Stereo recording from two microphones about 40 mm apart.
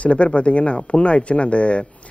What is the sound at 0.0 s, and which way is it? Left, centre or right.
Speech, left.